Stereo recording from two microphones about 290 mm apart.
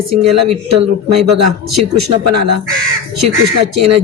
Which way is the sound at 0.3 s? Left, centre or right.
Right.